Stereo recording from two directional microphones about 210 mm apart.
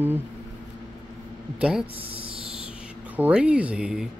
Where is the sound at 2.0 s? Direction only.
25° right (ahead or behind).